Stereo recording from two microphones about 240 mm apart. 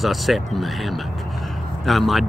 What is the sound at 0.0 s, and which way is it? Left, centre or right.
Speech, centre.